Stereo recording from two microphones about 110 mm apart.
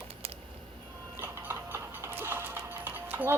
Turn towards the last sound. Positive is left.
turn(degrees=-20)  # may be behind; listen again after turning